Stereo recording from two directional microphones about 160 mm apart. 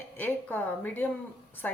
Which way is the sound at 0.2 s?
10° left (ahead or behind).